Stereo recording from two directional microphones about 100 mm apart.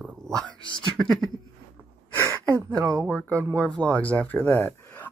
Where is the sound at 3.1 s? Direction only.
10° left (ahead or behind).